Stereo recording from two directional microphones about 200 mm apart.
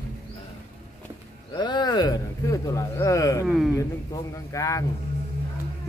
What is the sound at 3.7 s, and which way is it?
Speech, 15° left (ahead or behind).